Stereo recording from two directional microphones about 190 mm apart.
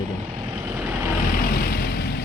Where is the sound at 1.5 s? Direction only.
55° left (ahead or behind).